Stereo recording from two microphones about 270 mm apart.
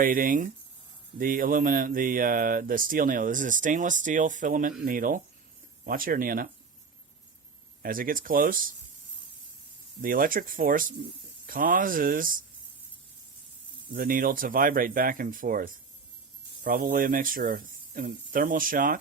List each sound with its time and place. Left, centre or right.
0.0 s speech: right
7.8 s speech: right
10.0 s speech: right
13.9 s speech: right